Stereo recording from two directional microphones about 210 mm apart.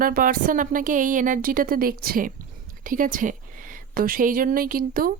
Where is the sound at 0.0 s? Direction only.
40° right (ahead or behind).